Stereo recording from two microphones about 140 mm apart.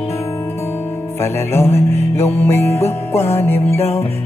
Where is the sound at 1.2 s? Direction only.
15° left (ahead or behind).